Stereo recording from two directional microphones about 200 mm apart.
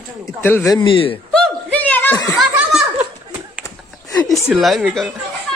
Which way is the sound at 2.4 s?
Centre (ahead or behind).